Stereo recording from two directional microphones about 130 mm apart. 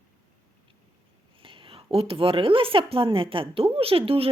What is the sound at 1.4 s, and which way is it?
A woman's voice, 40° right (ahead or behind).